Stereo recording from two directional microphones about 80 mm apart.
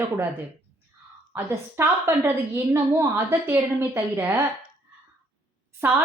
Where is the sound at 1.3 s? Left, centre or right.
Right.